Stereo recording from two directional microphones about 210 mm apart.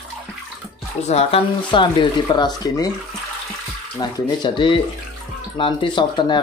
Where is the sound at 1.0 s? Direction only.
30° left (ahead or behind).